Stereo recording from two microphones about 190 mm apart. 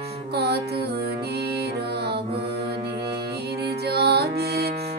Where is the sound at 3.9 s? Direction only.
60° right (ahead or behind).